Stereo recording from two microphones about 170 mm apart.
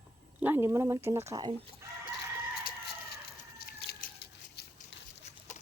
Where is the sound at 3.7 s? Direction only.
65° left (ahead or behind).